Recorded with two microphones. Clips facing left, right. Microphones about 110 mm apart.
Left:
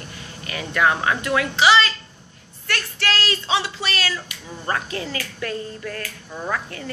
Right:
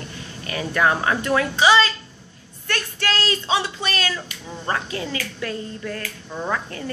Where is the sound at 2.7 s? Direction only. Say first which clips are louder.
Even; 25° right (ahead or behind).